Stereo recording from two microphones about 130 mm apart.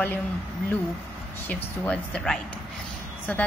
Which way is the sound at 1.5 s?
10° left (ahead or behind).